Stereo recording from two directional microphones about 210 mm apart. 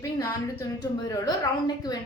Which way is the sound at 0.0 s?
15° left (ahead or behind).